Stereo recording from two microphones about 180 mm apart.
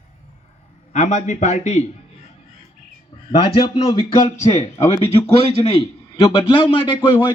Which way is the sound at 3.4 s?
35° left (ahead or behind).